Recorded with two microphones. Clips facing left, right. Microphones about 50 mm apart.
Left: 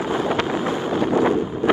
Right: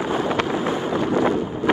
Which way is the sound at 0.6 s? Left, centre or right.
Right.